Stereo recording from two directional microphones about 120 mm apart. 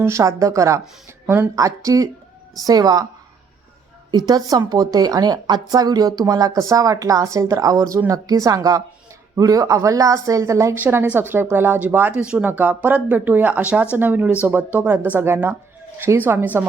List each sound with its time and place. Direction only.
0.0 s a woman's voice: 25° right (ahead or behind)
4.1 s a woman's voice: 35° right (ahead or behind); by 16.6 s 15° right (ahead or behind)